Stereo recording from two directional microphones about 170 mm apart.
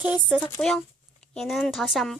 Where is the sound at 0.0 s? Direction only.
5° right (ahead or behind).